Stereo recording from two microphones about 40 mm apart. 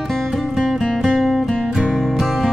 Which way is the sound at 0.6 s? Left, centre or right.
Centre.